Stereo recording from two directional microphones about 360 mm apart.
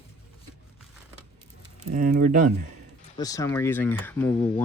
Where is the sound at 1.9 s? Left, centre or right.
Right.